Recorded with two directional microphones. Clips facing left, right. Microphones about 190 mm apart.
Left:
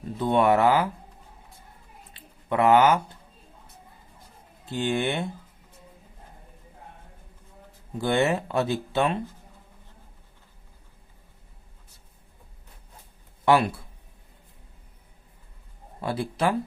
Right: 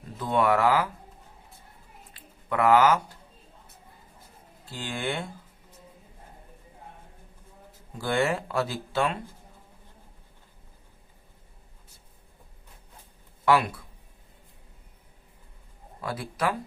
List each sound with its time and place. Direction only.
0.2 s speech: 25° left (ahead or behind)
2.1 s a sound: 25° left (ahead or behind)
4.6 s speech: 20° left (ahead or behind)
7.9 s speech: 20° left (ahead or behind)
13.4 s speech: 25° left (ahead or behind)
16.0 s speech: 25° left (ahead or behind)